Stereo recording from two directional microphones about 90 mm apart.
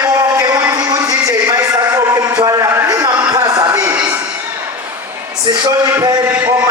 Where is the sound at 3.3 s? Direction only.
45° right (ahead or behind).